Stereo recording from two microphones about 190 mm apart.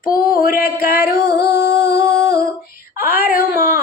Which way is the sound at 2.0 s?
15° right (ahead or behind).